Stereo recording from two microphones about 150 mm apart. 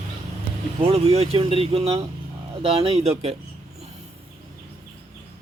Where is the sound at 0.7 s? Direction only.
40° right (ahead or behind).